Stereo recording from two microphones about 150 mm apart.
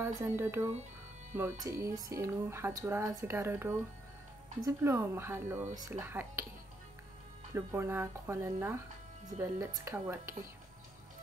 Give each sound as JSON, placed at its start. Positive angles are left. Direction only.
{"t": 0.0, "sound": "speech", "side_deg": -15}
{"t": 7.5, "sound": "speech", "side_deg": -15}